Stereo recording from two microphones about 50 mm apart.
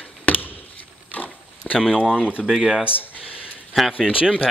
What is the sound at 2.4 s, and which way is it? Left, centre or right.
Speech, centre.